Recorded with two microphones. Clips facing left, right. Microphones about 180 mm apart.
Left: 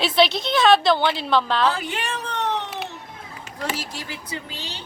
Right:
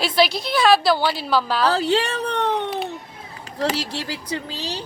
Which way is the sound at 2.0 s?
65° right (ahead or behind).